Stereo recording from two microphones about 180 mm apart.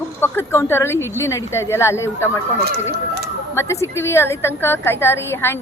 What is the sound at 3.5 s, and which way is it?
Speech, 15° left (ahead or behind).